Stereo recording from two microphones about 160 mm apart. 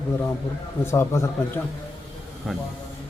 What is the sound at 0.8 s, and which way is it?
Speech, 15° left (ahead or behind).